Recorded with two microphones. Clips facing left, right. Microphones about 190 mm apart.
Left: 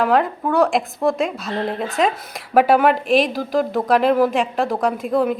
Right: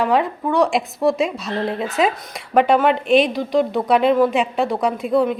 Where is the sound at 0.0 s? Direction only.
Centre (ahead or behind).